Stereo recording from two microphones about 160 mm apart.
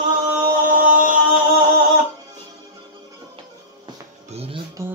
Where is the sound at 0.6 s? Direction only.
55° right (ahead or behind).